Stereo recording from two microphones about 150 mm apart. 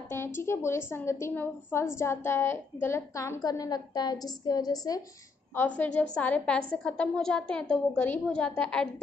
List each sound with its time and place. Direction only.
0.1 s a woman's voice: 15° left (ahead or behind)